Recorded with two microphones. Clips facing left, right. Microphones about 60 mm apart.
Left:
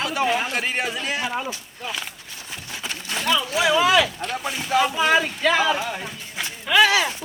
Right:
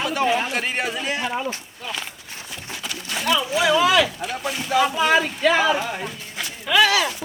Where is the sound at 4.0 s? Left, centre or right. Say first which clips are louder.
Right 1 dB; centre.